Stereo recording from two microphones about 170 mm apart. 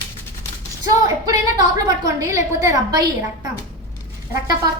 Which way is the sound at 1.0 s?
20° right (ahead or behind).